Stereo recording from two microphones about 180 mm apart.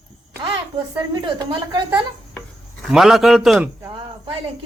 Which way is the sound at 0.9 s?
25° right (ahead or behind).